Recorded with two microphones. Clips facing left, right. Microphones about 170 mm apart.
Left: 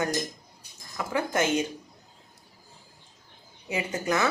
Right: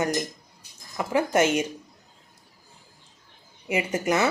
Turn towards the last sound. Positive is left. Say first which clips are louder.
# right 4 dB
turn(degrees=-20)  # may be behind; listen again after turning